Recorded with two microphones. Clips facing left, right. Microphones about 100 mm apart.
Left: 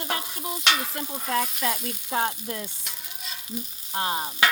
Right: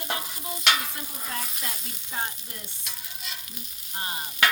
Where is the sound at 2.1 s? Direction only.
80° left.